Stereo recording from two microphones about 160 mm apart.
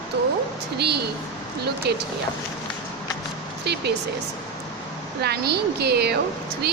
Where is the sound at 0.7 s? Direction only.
90° right.